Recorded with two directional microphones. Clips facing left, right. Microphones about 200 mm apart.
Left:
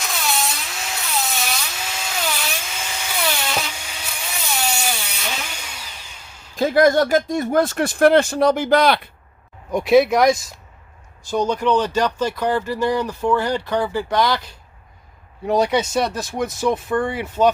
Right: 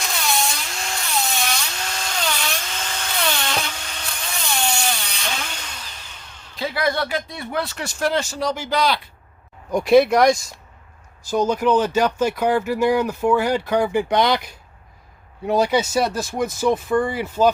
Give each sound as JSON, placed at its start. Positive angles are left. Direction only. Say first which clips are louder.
{"t": 0.0, "sound": "a sound", "louder": "even", "side_deg": 0}
{"t": 6.6, "sound": "speech", "louder": "left 8 dB", "side_deg": 45}
{"t": 9.7, "sound": "speech", "louder": "even", "side_deg": 0}
{"t": 15.4, "sound": "speech", "louder": "even", "side_deg": 0}